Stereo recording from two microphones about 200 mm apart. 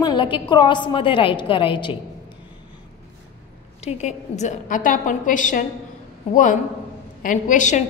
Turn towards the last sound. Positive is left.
turn(degrees=35)  # may be behind; listen again after turning